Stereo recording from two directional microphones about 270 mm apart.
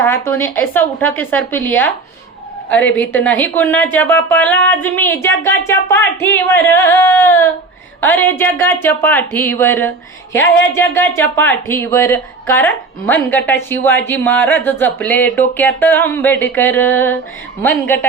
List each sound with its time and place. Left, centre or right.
0.3 s speech: centre